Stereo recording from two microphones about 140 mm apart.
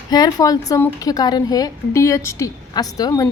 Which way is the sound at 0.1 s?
25° left (ahead or behind).